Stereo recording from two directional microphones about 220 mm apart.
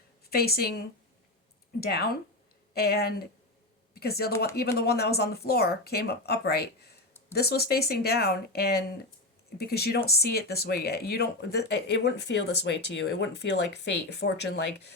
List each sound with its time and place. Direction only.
0.3 s speech: 45° left (ahead or behind)
1.8 s speech: 45° left (ahead or behind)